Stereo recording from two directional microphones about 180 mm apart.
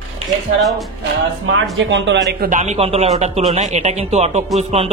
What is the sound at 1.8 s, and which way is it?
Speech, 85° right.